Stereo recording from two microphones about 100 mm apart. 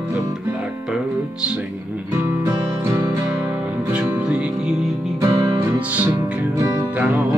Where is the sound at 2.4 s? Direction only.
30° right (ahead or behind).